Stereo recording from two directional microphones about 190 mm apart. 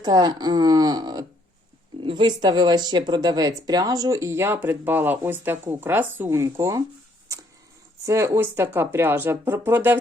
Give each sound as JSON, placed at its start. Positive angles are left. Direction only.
{"t": 0.0, "sound": "speech", "side_deg": -20}
{"t": 8.0, "sound": "speech", "side_deg": -15}